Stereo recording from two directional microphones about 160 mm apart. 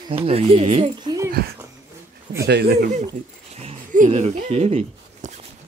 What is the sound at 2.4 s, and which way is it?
Speech, 90° right.